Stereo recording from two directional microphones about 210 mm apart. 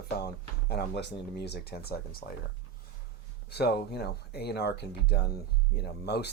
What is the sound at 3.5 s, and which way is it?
Speech, 50° left (ahead or behind).